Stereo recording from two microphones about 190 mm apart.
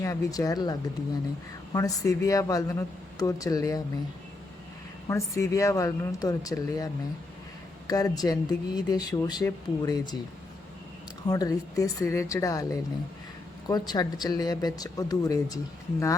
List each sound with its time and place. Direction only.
0.0 s speech: 15° left (ahead or behind)
5.0 s speech: 15° left (ahead or behind)
11.3 s speech: 20° left (ahead or behind)